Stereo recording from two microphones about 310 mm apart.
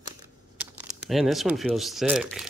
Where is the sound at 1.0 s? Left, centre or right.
Centre.